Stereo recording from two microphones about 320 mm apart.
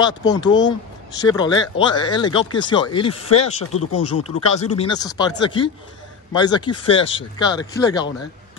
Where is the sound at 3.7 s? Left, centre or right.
Left.